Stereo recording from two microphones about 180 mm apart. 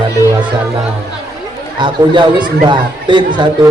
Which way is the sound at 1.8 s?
25° right (ahead or behind).